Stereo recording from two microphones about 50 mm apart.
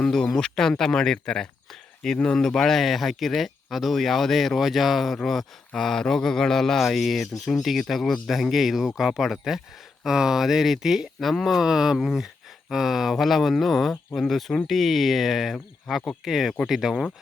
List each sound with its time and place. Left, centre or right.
0.0 s speech: centre
2.4 s speech: centre